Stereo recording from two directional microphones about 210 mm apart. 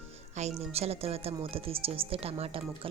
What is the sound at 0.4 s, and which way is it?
A woman's voice, 35° right (ahead or behind).